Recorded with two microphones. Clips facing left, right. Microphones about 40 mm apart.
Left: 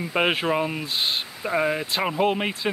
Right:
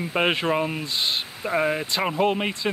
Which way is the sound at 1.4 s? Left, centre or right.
Centre.